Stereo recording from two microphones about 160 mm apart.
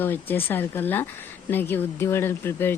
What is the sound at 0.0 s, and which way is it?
A woman's voice, 15° left (ahead or behind).